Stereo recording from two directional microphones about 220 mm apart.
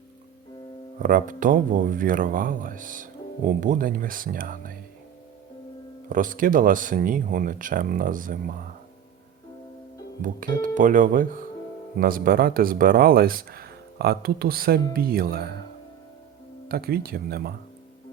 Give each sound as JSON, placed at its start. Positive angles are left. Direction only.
{"t": 1.0, "sound": "speech", "side_deg": -40}
{"t": 6.1, "sound": "speech", "side_deg": -40}
{"t": 10.2, "sound": "speech", "side_deg": -35}
{"t": 16.6, "sound": "speech", "side_deg": -45}